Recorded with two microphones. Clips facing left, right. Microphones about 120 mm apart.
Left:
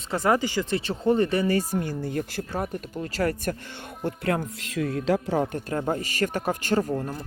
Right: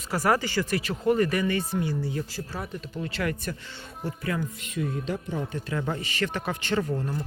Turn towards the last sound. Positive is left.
turn(degrees=40)  # may be behind; listen again after turning